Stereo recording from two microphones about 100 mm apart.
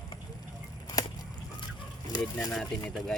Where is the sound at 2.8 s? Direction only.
5° left (ahead or behind).